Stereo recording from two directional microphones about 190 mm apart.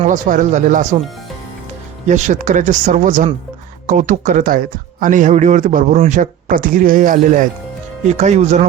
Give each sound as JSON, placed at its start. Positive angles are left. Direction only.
{"t": 0.0, "sound": "speech", "side_deg": -40}
{"t": 2.0, "sound": "speech", "side_deg": -40}